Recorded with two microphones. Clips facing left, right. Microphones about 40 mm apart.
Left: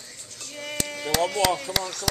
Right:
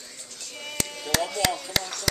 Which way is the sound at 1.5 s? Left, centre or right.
Left.